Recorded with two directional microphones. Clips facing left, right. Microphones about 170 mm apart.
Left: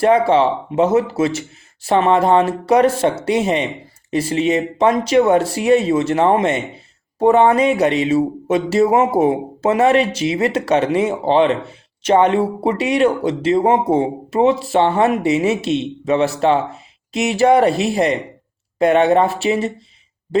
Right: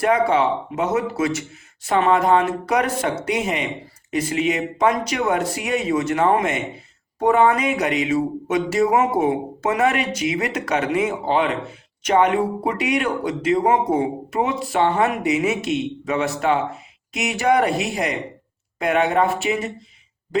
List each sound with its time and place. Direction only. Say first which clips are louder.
0.0 s speech: left 5 dB; 30° left (ahead or behind)